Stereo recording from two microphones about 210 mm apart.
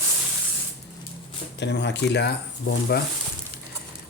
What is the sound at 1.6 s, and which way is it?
Speech, 55° left (ahead or behind).